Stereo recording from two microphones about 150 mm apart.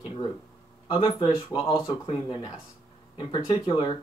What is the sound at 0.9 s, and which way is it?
Speech, 35° left (ahead or behind).